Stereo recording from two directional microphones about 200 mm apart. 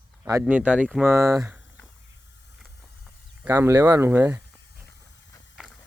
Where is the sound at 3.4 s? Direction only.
15° right (ahead or behind).